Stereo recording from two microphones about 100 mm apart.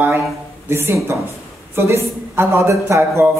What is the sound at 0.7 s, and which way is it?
A man's voice, 25° right (ahead or behind).